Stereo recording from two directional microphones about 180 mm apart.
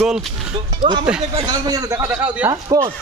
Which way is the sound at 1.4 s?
20° right (ahead or behind).